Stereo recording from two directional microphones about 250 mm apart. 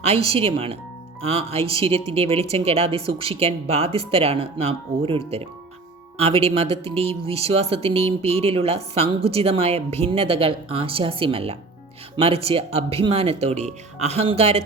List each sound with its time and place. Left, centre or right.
0.0 s speech: right